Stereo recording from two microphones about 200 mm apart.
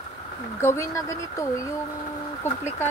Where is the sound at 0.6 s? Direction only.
15° left (ahead or behind).